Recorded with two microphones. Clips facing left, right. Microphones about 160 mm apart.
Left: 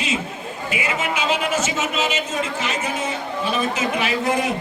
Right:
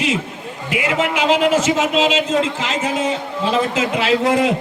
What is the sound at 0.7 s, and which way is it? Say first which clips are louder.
A man's voice: right 6 dB; 60° right (ahead or behind).